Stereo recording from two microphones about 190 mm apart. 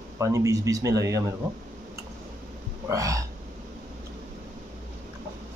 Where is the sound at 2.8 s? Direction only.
15° right (ahead or behind).